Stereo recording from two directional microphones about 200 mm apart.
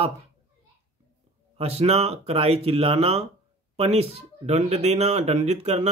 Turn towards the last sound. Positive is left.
turn(degrees=-35)  # may be behind; listen again after turning